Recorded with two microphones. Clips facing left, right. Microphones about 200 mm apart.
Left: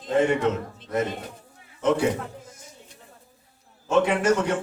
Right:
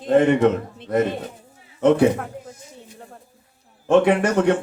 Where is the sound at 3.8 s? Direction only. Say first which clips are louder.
Right 5 dB; 60° right (ahead or behind).